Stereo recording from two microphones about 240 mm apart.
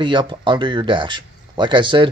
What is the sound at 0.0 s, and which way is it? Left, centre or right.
Speech, centre.